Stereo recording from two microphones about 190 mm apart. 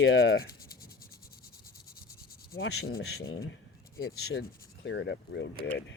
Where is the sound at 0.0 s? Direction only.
90° left.